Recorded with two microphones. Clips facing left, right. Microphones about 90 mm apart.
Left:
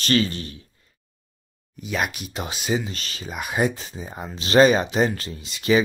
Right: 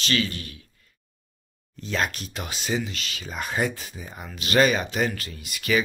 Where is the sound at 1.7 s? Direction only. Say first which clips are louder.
Left 1 dB; 10° left (ahead or behind).